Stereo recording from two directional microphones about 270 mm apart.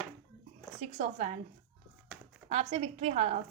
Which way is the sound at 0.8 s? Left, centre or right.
Right.